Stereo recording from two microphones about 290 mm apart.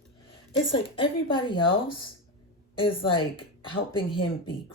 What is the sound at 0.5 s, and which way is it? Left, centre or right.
Speech, centre.